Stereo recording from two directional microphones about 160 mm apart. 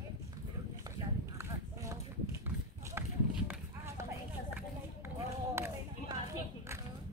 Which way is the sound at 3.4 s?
15° right (ahead or behind).